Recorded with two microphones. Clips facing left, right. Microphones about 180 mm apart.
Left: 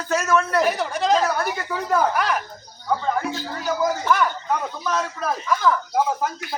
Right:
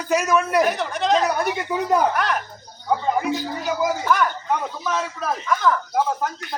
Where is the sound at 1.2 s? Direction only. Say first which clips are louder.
Right 1 dB; 20° right (ahead or behind).